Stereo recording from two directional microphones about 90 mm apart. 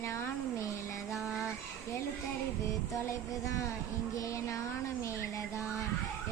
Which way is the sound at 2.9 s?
35° left (ahead or behind).